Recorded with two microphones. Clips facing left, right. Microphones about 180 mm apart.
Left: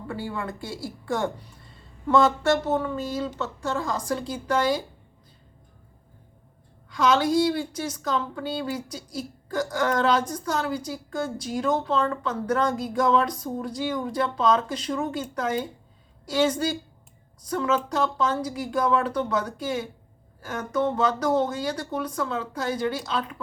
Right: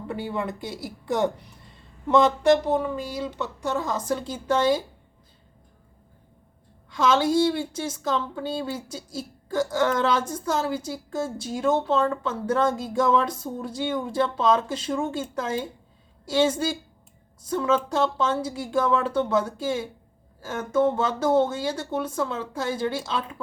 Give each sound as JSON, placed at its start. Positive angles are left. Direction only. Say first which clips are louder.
{"t": 0.1, "sound": "a woman's voice", "louder": "right 2 dB", "side_deg": -20}
{"t": 6.9, "sound": "a woman's voice", "louder": "even", "side_deg": -25}